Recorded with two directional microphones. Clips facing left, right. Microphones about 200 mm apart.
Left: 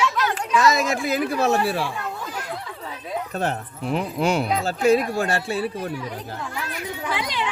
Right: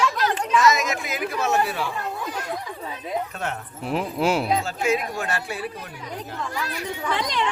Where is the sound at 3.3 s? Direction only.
35° left (ahead or behind).